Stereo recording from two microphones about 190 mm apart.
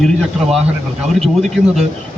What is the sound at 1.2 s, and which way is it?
Speech, centre (ahead or behind).